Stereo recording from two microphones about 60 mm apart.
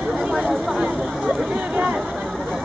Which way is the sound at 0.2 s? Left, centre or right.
Centre.